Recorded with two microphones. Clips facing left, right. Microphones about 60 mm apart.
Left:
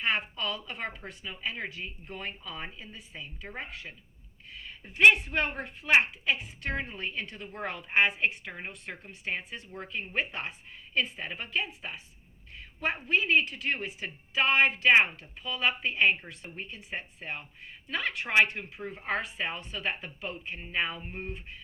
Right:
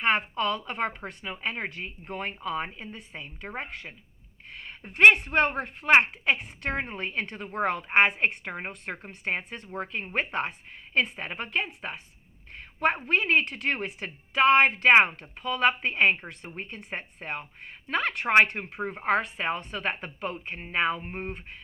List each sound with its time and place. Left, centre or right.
0.0 s a woman's voice: right
5.1 s a woman's voice: right
6.7 s a woman's voice: right
9.7 s a woman's voice: right